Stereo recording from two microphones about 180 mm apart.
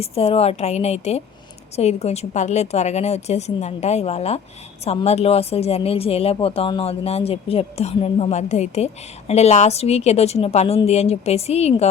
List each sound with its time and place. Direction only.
0.0 s a woman's voice: 35° left (ahead or behind)